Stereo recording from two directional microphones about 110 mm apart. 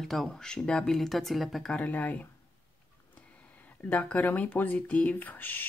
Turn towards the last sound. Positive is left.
turn(degrees=15)  # may be behind; listen again after turning